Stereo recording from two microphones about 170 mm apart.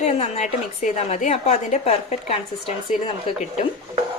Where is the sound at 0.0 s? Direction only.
40° left (ahead or behind).